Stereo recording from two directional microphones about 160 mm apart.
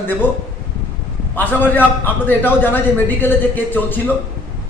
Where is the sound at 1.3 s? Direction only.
10° left (ahead or behind).